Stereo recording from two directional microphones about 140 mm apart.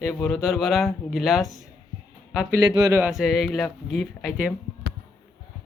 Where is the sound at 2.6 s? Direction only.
25° right (ahead or behind).